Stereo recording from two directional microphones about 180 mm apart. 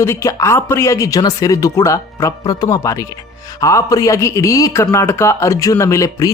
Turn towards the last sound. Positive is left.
turn(degrees=15)  # may be behind; listen again after turning